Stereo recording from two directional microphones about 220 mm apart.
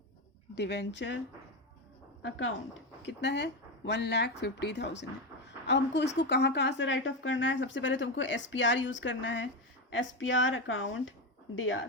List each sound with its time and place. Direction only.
0.5 s speech: 50° left (ahead or behind)
2.2 s a woman's voice: 60° left (ahead or behind)